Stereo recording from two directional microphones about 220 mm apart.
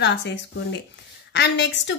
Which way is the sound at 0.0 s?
55° left (ahead or behind).